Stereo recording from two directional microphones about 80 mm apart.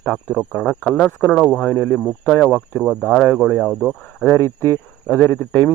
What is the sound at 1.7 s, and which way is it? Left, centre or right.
Speech, left.